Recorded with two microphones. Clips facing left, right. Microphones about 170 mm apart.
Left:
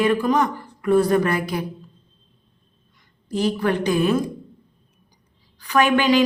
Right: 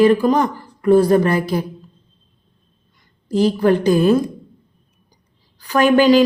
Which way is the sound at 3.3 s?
35° right (ahead or behind).